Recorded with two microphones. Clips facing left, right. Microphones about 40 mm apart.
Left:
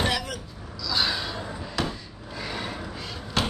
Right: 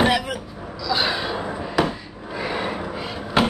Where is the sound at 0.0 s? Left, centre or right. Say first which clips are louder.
Right 7 dB; centre.